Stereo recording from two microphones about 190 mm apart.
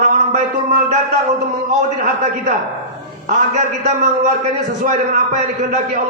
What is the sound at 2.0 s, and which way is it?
A man's voice, 40° right (ahead or behind).